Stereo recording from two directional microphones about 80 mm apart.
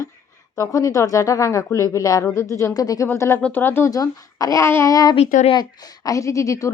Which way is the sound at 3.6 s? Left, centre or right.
Left.